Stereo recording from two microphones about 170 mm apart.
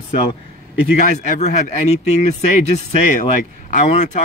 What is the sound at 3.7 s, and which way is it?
Speech, 45° left (ahead or behind).